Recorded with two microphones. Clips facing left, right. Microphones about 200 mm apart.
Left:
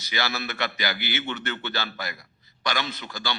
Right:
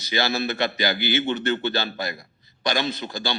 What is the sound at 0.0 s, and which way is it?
A man's voice, 30° right (ahead or behind).